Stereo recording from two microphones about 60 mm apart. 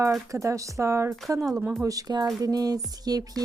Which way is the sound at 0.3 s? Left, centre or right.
Right.